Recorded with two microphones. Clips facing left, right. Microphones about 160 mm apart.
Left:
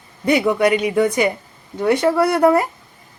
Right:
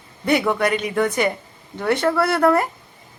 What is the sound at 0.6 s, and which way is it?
Speech, 15° left (ahead or behind).